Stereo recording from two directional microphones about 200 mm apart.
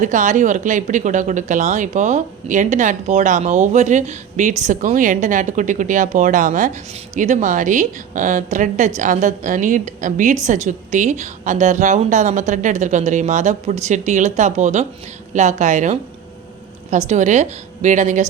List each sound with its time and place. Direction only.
0.0 s speech: 40° right (ahead or behind)
17.1 s speech: 35° right (ahead or behind)